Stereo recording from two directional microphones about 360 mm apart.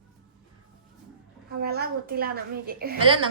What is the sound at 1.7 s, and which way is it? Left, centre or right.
A woman's voice, right.